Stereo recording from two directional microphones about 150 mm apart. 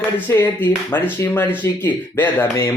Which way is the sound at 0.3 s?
15° left (ahead or behind).